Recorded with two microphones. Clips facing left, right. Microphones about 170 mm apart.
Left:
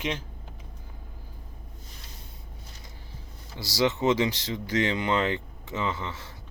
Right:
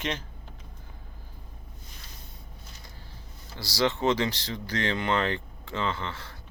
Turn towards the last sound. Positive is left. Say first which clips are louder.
# even
turn(degrees=20)  # may be behind; listen again after turning